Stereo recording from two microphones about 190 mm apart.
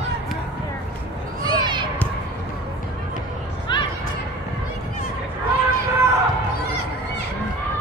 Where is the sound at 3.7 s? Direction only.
25° left (ahead or behind).